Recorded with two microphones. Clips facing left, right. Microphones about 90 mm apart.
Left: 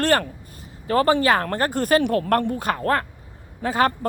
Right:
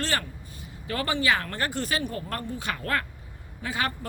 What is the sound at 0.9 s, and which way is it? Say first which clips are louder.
Speech: left 8 dB; 40° left (ahead or behind).